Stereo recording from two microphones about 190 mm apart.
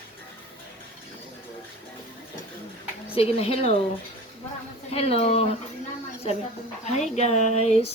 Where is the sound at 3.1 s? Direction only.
30° left (ahead or behind).